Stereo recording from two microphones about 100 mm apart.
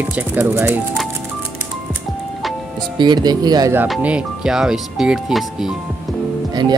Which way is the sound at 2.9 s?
45° right (ahead or behind).